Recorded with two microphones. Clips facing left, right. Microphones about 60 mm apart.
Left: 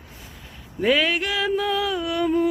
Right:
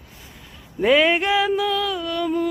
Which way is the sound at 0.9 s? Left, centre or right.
Centre.